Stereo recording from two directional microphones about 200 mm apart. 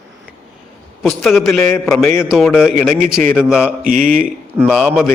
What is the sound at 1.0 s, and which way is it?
Speech, 5° left (ahead or behind).